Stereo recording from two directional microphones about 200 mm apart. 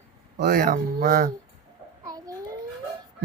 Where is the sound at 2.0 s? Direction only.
15° right (ahead or behind).